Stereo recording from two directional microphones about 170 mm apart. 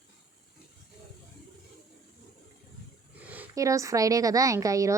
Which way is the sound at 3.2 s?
10° right (ahead or behind).